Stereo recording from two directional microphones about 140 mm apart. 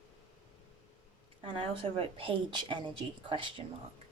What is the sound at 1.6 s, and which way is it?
A woman's voice, 40° right (ahead or behind).